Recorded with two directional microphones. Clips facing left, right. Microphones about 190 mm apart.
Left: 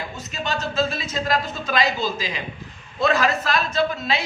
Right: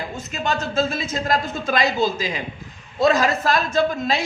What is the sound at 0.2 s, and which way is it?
A man's voice, 50° right (ahead or behind).